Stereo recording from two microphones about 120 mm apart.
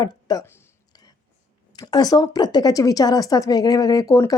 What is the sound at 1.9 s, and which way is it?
A woman's voice, 30° left (ahead or behind).